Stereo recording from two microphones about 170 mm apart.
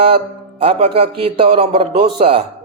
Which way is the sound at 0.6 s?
35° right (ahead or behind).